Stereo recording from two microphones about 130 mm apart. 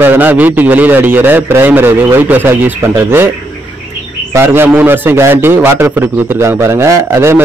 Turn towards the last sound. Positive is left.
turn(degrees=-20)  # may be behind; listen again after turning